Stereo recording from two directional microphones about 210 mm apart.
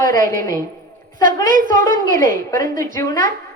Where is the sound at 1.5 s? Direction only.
40° right (ahead or behind).